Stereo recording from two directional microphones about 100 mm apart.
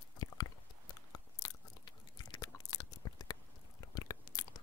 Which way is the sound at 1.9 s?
45° left (ahead or behind).